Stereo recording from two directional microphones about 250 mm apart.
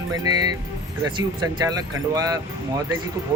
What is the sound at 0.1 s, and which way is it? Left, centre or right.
Speech, centre.